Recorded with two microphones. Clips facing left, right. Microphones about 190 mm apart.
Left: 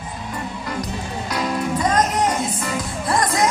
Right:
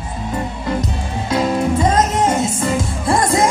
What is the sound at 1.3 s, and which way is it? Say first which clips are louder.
Music: right 6 dB; 25° right (ahead or behind).